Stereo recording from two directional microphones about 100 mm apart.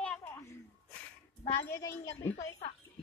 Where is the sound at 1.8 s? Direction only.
30° left (ahead or behind).